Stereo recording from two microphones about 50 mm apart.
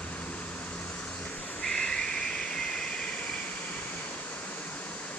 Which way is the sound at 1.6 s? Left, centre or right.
Centre.